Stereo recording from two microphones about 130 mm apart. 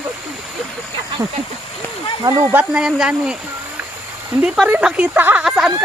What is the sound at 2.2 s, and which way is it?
Speech, 25° right (ahead or behind).